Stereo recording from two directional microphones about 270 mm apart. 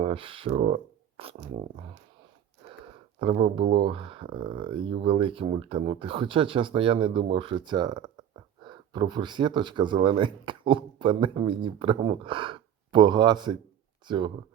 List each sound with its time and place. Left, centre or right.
0.0 s speech: centre
3.3 s speech: right